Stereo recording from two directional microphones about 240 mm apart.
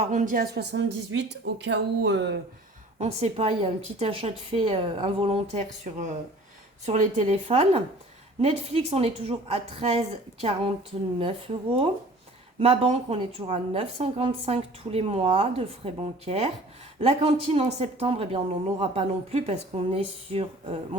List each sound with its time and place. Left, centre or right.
0.0 s a woman's voice: right
3.0 s speech: right
11.2 s speech: right